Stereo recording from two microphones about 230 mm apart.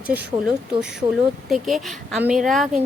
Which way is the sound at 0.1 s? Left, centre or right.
Centre.